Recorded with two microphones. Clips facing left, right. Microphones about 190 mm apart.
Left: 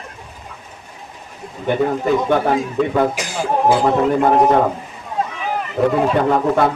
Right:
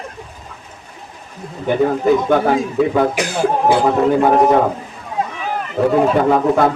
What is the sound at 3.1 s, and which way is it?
Speech, 65° right (ahead or behind).